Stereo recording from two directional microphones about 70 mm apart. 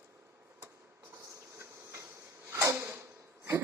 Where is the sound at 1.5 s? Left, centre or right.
Right.